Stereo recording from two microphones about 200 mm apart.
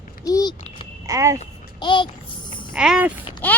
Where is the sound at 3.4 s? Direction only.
10° left (ahead or behind).